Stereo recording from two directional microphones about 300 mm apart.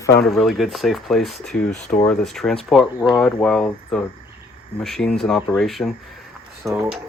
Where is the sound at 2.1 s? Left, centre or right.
Centre.